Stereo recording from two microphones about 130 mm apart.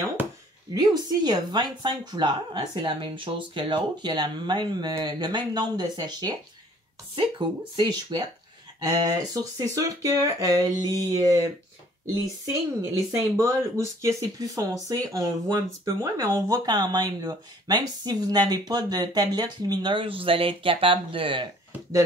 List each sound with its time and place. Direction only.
0.2 s a sound: 15° right (ahead or behind)
0.7 s speech: 30° right (ahead or behind)
12.9 s speech: 20° right (ahead or behind); by 21.5 s 40° right (ahead or behind)